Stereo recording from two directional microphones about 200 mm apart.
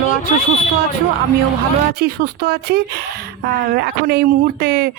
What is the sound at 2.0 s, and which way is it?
Speech, 50° right (ahead or behind).